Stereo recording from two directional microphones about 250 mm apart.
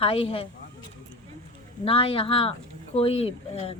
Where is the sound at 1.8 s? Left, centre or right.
Left.